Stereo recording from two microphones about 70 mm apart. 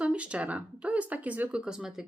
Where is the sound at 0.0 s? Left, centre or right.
Centre.